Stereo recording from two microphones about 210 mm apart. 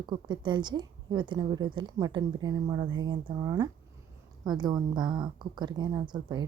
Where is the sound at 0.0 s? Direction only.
20° right (ahead or behind).